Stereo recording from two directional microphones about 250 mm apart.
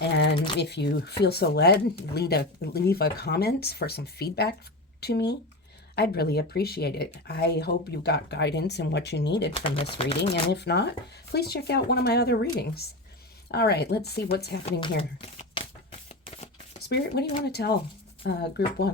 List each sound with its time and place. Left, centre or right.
0.3 s typing: centre
0.6 s speech: left
9.5 s speech: left
10.5 s speech: left
14.6 s speech: left
15.6 s typewriter: centre
16.9 s speech: left